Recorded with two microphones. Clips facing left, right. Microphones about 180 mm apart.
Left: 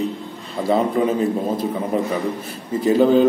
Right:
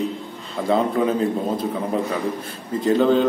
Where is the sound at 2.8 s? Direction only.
5° left (ahead or behind).